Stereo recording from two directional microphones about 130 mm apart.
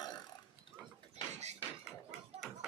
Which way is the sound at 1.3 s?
60° right (ahead or behind).